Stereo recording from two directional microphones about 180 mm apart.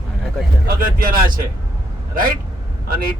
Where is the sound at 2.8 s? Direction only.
50° right (ahead or behind).